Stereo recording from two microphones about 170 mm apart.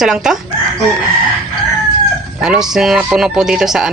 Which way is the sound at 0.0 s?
5° right (ahead or behind).